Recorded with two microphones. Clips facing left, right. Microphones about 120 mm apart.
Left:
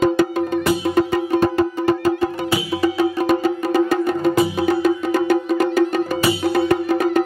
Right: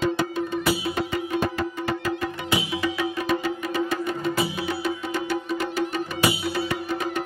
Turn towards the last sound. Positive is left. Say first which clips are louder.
# left 10 dB
turn(degrees=50)  # may be behind; listen again after turning